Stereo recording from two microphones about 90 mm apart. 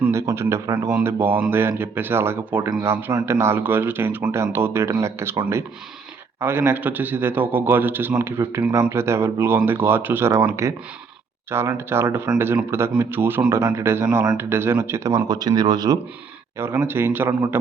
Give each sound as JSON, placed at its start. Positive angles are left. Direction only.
{"t": 0.1, "sound": "a man's voice", "side_deg": -30}
{"t": 6.4, "sound": "a man's voice", "side_deg": -25}
{"t": 10.5, "sound": "a man's voice", "side_deg": -35}
{"t": 16.6, "sound": "a man's voice", "side_deg": -25}